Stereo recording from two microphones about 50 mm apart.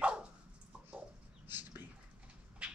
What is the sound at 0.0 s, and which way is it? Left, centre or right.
Dog, right.